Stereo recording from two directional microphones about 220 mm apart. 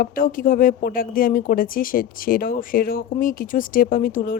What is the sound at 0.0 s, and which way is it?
Speech, 40° left (ahead or behind).